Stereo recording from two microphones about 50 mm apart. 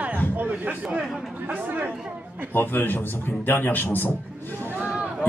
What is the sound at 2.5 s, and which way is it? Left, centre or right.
A man's voice, left.